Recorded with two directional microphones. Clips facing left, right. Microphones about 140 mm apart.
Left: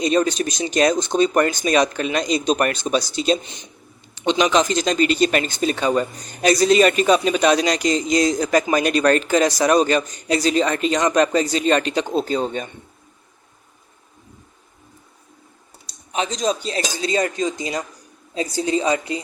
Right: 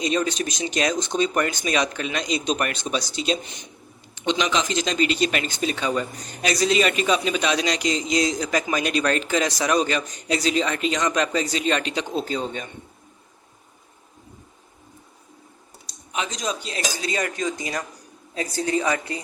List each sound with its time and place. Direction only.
0.0 s a man's voice: 40° left (ahead or behind)
16.1 s speech: 30° left (ahead or behind)